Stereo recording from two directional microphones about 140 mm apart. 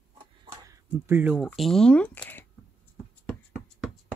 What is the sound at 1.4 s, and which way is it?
Speech, centre (ahead or behind).